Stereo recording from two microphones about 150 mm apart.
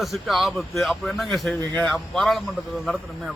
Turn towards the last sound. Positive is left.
turn(degrees=0)  # may be behind; listen again after turning